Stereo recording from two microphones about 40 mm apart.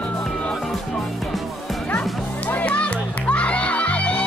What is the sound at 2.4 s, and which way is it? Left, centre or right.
Music, left.